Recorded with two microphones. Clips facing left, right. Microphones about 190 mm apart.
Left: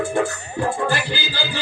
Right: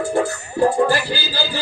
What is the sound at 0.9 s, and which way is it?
Music, 35° right (ahead or behind).